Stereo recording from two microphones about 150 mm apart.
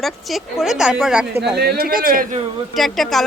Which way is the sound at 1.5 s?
90° right.